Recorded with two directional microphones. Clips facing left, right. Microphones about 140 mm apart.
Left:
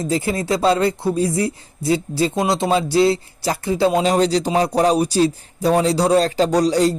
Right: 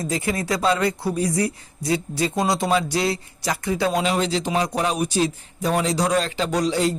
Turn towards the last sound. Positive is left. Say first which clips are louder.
# left 5 dB
turn(degrees=35)  # may be behind; listen again after turning